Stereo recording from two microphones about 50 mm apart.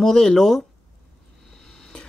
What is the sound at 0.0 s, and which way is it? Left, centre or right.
Speech, centre.